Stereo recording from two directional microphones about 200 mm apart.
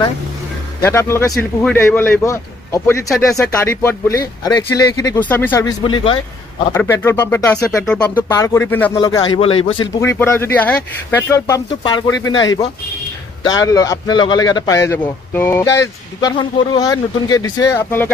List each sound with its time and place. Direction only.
0.7 s speech: 15° left (ahead or behind)
6.7 s speech: 10° left (ahead or behind)
8.9 s speech: 20° left (ahead or behind)
9.9 s speech: 10° left (ahead or behind)
16.2 s speech: 20° left (ahead or behind)